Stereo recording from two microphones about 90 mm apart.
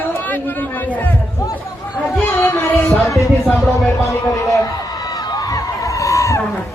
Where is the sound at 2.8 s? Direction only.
30° left (ahead or behind).